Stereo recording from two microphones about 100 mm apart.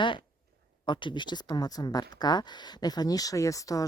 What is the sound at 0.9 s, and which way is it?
Speech, 50° left (ahead or behind).